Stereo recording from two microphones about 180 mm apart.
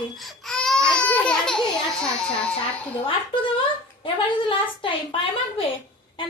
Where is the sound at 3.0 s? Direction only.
30° left (ahead or behind).